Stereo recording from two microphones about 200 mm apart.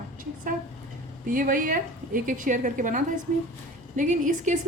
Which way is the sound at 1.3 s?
45° right (ahead or behind).